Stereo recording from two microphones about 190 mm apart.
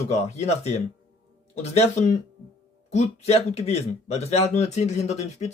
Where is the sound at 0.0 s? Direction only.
35° left (ahead or behind).